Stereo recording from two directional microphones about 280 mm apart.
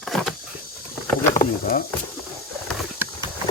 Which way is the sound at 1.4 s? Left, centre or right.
Left.